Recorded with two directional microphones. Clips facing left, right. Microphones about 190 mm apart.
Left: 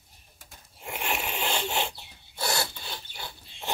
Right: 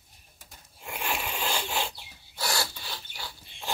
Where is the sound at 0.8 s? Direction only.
20° left (ahead or behind).